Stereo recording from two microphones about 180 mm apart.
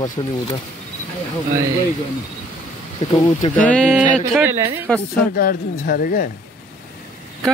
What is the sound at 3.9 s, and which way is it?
Speech, 5° right (ahead or behind).